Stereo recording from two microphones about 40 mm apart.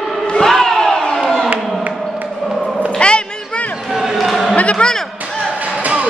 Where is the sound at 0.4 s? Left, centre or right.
Centre.